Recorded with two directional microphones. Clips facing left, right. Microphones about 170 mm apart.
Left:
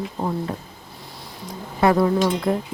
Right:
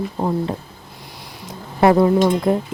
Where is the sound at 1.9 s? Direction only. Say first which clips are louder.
Right 4 dB; 25° right (ahead or behind).